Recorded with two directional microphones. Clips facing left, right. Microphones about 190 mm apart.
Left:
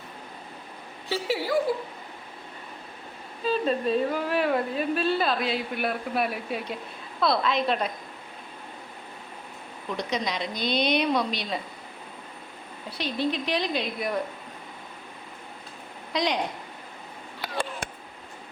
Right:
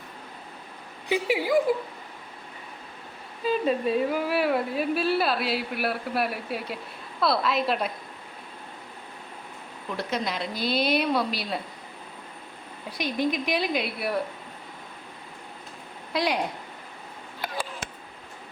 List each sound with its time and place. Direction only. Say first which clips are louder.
1.0 s speech: right 3 dB; 15° right (ahead or behind)
3.4 s a woman's voice: right 1 dB; 10° right (ahead or behind)
10.0 s a woman's voice: even; 5° right (ahead or behind)
12.9 s speech: right 1 dB; 10° right (ahead or behind)
16.1 s a woman's voice: even; 5° right (ahead or behind)